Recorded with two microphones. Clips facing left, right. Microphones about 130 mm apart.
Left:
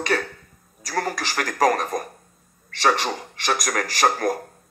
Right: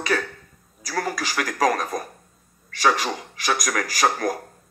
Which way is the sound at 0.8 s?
45° left (ahead or behind).